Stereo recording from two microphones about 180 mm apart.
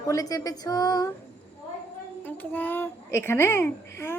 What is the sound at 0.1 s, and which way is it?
Speech, 20° left (ahead or behind).